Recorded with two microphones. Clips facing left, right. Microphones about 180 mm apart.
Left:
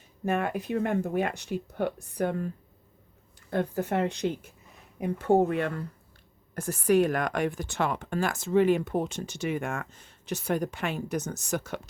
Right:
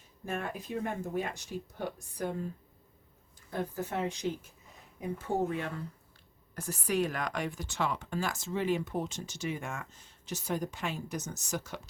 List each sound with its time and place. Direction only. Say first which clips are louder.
0.3 s speech: left 8 dB; 65° left (ahead or behind)
3.5 s speech: left 7 dB; 65° left (ahead or behind)